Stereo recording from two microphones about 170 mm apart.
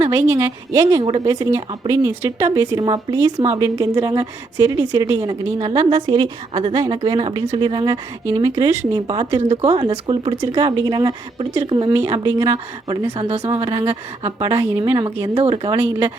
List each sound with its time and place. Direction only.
0.0 s speech: 15° right (ahead or behind)
3.3 s speech: 40° right (ahead or behind)
3.6 s speech: 20° right (ahead or behind)
9.4 s speech: 35° right (ahead or behind); by 13.1 s 20° right (ahead or behind)
13.1 s speech: 35° right (ahead or behind)
13.7 s speech: 20° right (ahead or behind)
14.5 s a woman's voice: 15° right (ahead or behind)
15.4 s speech: 35° right (ahead or behind)